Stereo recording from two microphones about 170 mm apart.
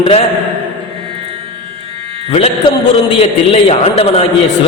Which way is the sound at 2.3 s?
35° left (ahead or behind).